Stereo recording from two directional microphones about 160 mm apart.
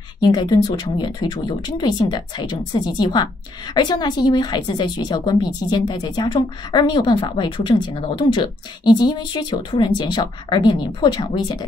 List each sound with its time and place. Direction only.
0.2 s speech: 25° left (ahead or behind)